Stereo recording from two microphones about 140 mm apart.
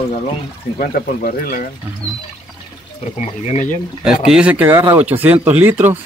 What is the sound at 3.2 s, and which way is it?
Speech, 55° left (ahead or behind).